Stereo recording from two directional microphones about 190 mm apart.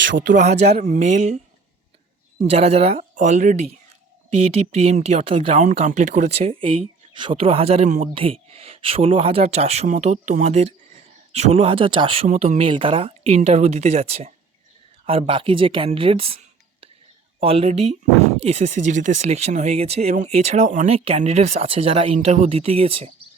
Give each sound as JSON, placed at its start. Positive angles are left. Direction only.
{"t": 0.0, "sound": "speech", "side_deg": -75}
{"t": 0.6, "sound": "speech", "side_deg": -35}
{"t": 2.5, "sound": "speech", "side_deg": -30}